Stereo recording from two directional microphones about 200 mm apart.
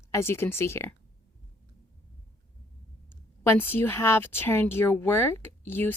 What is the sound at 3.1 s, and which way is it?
A woman's voice, 10° left (ahead or behind).